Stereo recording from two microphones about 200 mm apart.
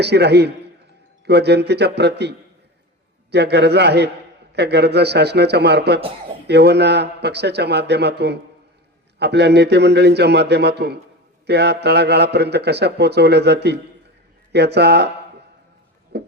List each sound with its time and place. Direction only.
0.0 s a man's voice: 55° right (ahead or behind)
3.3 s a man's voice: 55° right (ahead or behind)
16.1 s a sound: 55° right (ahead or behind)